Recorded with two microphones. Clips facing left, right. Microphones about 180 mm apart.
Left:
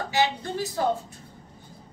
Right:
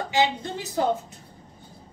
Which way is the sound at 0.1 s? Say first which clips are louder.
Right 1 dB; 20° right (ahead or behind).